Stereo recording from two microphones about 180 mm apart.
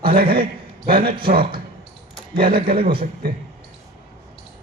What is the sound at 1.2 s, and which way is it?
Speech, 55° right (ahead or behind).